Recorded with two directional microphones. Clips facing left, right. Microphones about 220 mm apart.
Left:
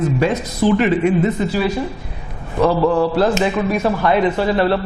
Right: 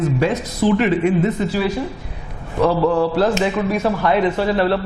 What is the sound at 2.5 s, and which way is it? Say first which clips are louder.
Speech: left 1 dB; 25° left (ahead or behind).